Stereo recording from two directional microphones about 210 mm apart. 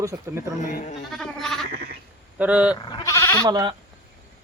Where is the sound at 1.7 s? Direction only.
45° right (ahead or behind).